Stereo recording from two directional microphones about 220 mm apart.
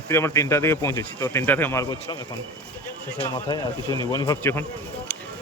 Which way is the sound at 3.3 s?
20° left (ahead or behind).